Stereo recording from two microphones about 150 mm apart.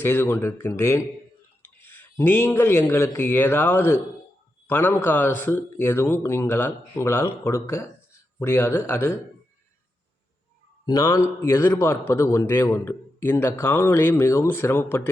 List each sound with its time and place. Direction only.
0.0 s a man's voice: 15° left (ahead or behind)
10.8 s a man's voice: 25° left (ahead or behind)